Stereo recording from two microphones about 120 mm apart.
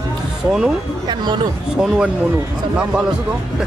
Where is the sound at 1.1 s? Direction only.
35° right (ahead or behind).